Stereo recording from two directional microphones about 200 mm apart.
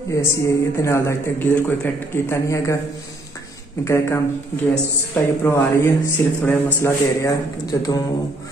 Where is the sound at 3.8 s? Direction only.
15° left (ahead or behind).